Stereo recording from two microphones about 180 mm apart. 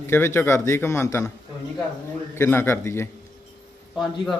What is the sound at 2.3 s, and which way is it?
Speech, 15° left (ahead or behind).